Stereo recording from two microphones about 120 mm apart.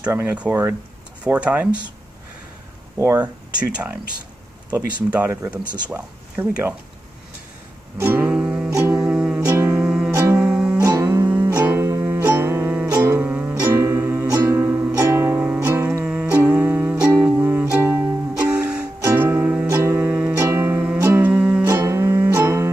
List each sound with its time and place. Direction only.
0.1 s speech: 15° right (ahead or behind)
3.0 s speech: 20° right (ahead or behind)
3.5 s speech: 10° right (ahead or behind)
5.1 s speech: 15° right (ahead or behind)
8.0 s music: 15° right (ahead or behind)
10.1 s music: 25° right (ahead or behind)
10.4 s music: 10° right (ahead or behind)
19.0 s music: 20° right (ahead or behind)
21.6 s music: 25° right (ahead or behind)